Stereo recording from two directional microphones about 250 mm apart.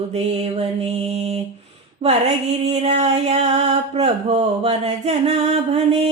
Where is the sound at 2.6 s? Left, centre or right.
Right.